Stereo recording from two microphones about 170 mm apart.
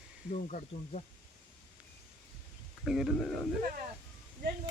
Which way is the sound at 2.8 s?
Centre (ahead or behind).